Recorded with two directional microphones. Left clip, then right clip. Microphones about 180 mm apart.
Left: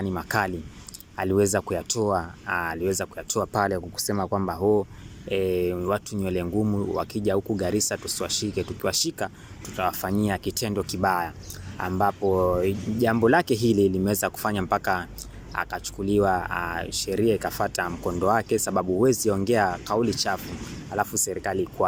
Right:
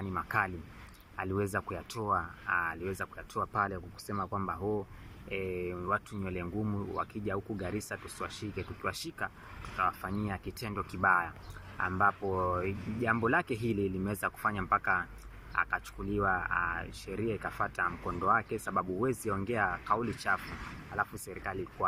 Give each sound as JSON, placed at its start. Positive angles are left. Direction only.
{"t": 0.0, "sound": "speech", "side_deg": 40}